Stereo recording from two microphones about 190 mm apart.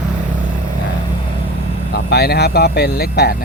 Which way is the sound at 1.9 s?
55° left (ahead or behind).